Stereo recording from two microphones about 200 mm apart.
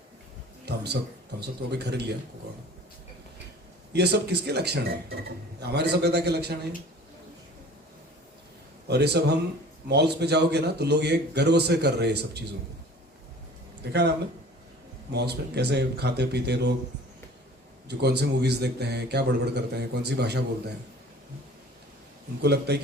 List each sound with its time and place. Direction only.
0.7 s a sound: 55° right (ahead or behind)
1.4 s speech: 55° right (ahead or behind)
3.9 s speech: 55° right (ahead or behind)
8.9 s speech: 55° right (ahead or behind)
15.1 s speech: 55° right (ahead or behind)
17.8 s speech: 55° right (ahead or behind)
22.4 s speech: 55° right (ahead or behind)